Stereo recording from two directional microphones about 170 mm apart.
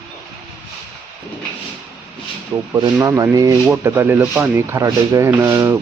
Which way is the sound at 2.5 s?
20° right (ahead or behind).